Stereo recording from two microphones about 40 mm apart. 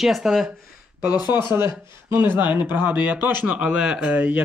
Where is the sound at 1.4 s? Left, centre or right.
Right.